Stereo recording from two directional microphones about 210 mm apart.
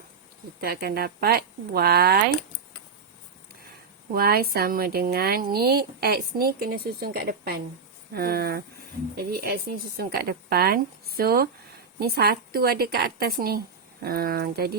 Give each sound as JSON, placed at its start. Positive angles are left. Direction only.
{"t": 0.6, "sound": "speech", "side_deg": -45}
{"t": 4.1, "sound": "speech", "side_deg": -45}